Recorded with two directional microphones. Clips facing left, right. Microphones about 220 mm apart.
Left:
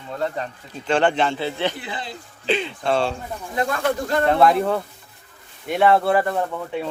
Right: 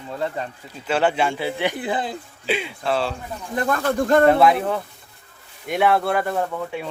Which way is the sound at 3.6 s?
55° right (ahead or behind).